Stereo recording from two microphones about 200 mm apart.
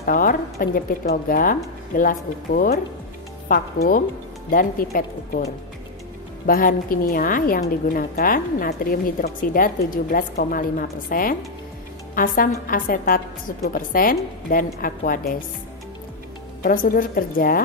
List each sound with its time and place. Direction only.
0.0 s a woman's voice: 45° left (ahead or behind)
6.4 s a woman's voice: 45° left (ahead or behind)
16.6 s a woman's voice: 45° left (ahead or behind)